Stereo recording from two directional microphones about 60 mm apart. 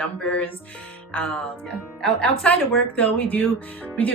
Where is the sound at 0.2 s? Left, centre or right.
Left.